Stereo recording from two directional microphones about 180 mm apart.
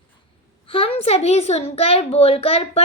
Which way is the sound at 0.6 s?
30° left (ahead or behind).